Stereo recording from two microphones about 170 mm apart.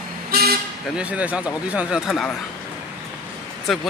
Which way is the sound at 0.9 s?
5° right (ahead or behind).